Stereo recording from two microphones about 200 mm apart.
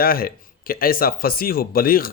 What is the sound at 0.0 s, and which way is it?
Speech, 45° left (ahead or behind).